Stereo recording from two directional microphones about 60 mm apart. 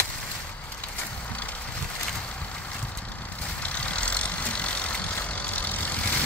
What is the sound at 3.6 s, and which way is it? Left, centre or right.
Vehicle, left.